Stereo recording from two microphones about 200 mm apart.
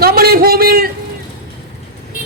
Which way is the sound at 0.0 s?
50° right (ahead or behind).